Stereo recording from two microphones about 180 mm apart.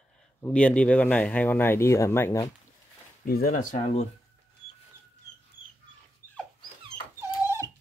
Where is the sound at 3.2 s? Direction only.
55° left (ahead or behind); by 4.1 s 40° left (ahead or behind).